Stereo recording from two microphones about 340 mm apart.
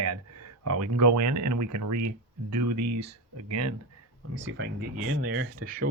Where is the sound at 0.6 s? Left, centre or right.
Right.